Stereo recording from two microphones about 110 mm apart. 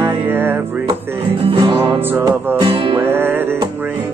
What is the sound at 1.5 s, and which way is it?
Music, 55° right (ahead or behind).